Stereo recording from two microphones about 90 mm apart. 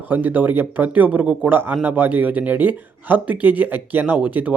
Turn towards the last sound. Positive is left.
turn(degrees=-15)  # may be behind; listen again after turning